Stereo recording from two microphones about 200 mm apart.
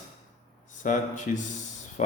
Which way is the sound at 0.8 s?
40° left (ahead or behind).